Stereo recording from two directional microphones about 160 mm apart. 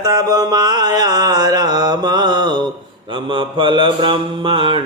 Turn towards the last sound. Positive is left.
turn(degrees=-30)  # may be behind; listen again after turning